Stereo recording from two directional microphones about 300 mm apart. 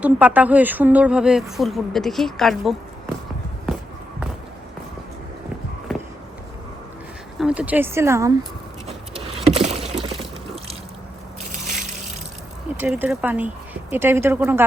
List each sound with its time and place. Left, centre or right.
0.0 s a woman's voice: centre
5.9 s a sound: centre
7.3 s speech: centre
8.9 s vehicle: centre
9.6 s a sound: centre
12.7 s a woman's voice: centre